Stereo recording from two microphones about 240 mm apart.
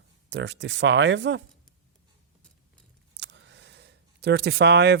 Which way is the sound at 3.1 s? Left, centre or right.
Right.